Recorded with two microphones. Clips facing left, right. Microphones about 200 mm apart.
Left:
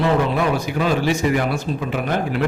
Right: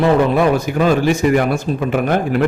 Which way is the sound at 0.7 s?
50° right (ahead or behind).